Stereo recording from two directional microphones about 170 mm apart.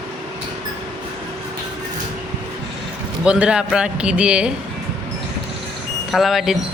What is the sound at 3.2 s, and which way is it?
Speech, 5° right (ahead or behind).